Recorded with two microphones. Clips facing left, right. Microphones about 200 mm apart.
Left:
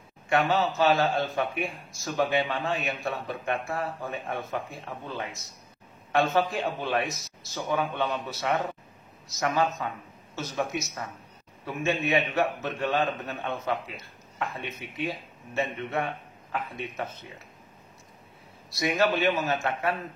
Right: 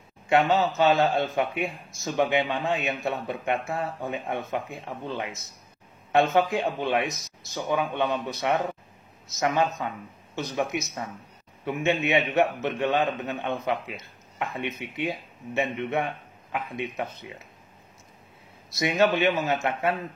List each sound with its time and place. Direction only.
0.3 s a man's voice: 20° right (ahead or behind)
0.9 s a man's voice: centre (ahead or behind)
1.3 s a man's voice: 20° right (ahead or behind)
6.3 s a man's voice: 20° right (ahead or behind)
18.7 s a man's voice: 20° right (ahead or behind)